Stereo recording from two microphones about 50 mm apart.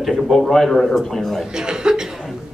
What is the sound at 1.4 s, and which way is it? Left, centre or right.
Chuckle, centre.